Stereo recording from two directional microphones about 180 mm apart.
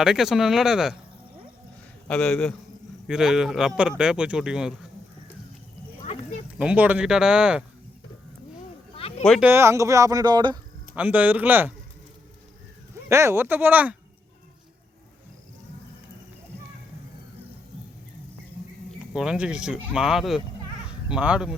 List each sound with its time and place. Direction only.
0.0 s a man's voice: 5° right (ahead or behind)
2.0 s a man's voice: 5° left (ahead or behind)
6.6 s a man's voice: 5° right (ahead or behind)
9.0 s a sound: 35° left (ahead or behind)
9.4 s speech: 15° right (ahead or behind)
10.9 s speech: 10° right (ahead or behind)
13.1 s speech: 15° right (ahead or behind)
19.1 s a man's voice: 5° right (ahead or behind)